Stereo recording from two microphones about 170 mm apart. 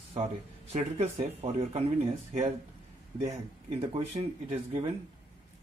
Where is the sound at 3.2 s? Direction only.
35° right (ahead or behind).